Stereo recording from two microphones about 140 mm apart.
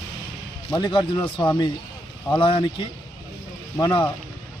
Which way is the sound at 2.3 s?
35° left (ahead or behind).